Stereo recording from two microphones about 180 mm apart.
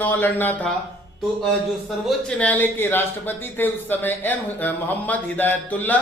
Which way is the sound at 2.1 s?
5° left (ahead or behind).